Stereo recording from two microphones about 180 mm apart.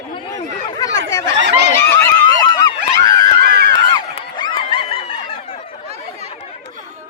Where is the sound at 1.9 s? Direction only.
20° left (ahead or behind).